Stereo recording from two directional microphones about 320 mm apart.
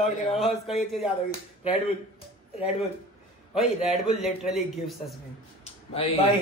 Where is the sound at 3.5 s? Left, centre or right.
Centre.